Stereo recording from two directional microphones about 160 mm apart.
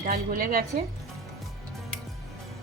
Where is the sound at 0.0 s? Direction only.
60° right (ahead or behind).